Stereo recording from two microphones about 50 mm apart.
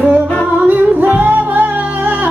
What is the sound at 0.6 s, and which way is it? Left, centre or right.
Music, right.